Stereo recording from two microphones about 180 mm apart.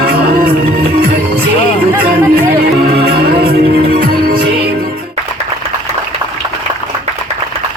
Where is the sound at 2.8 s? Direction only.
60° right (ahead or behind).